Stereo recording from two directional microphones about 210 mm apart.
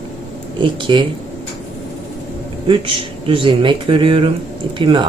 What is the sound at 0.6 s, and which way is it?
Speech, 25° right (ahead or behind).